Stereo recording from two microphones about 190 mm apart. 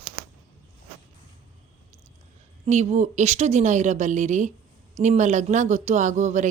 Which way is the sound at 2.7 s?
35° right (ahead or behind).